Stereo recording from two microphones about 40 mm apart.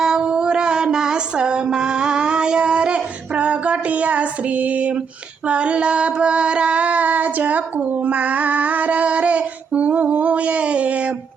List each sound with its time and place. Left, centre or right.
0.0 s female singing: centre; by 4.9 s right
5.5 s child singing: right